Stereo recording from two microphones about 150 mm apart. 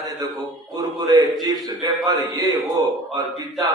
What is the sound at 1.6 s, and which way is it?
A man's voice, 25° right (ahead or behind).